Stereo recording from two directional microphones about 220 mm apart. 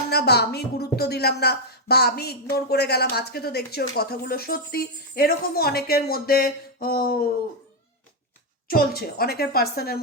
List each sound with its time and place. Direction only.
0.1 s a woman's voice: 45° left (ahead or behind)
8.6 s a woman's voice: 40° left (ahead or behind)